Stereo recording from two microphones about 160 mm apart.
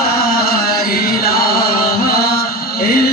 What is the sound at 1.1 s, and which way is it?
Chant, 70° left (ahead or behind).